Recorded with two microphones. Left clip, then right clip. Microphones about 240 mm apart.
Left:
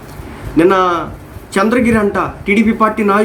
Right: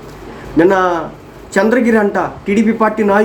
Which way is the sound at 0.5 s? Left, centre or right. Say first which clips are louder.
Even; centre.